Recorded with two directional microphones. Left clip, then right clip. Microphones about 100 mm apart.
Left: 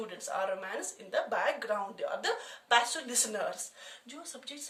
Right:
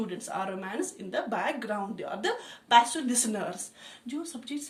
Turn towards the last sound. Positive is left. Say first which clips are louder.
# right 3 dB
turn(degrees=35)  # may be behind; listen again after turning